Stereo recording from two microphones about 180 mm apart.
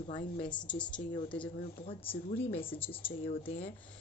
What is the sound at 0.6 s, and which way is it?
Speech, 5° left (ahead or behind).